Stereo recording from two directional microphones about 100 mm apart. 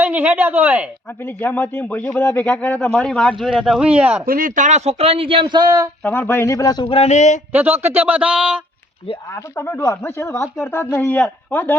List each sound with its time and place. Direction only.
0.0 s speech: 20° right (ahead or behind)
1.2 s speech: 20° left (ahead or behind)
2.9 s a man's voice: 5° left (ahead or behind); by 4.2 s 10° right (ahead or behind)
4.8 s speech: 90° right; by 5.8 s 45° right (ahead or behind)
6.0 s speech: 20° left (ahead or behind); by 6.8 s 35° left (ahead or behind)
6.8 s speech: 70° left (ahead or behind)
7.5 s a man's voice: 20° right (ahead or behind)
9.3 s speech: 30° left (ahead or behind)
10.9 s speech: 10° left (ahead or behind)